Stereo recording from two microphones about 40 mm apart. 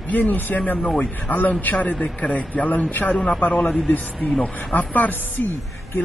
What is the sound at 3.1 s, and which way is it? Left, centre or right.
Speech, left.